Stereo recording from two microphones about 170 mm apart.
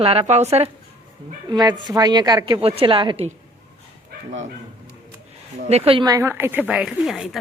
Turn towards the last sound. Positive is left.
turn(degrees=0)  # may be behind; listen again after turning